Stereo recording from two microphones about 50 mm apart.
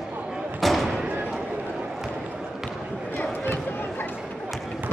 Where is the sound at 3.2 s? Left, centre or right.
Left.